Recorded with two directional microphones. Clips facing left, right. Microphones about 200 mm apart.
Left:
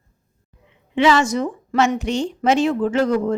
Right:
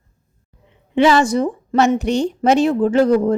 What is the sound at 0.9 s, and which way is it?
A woman's voice, 35° right (ahead or behind).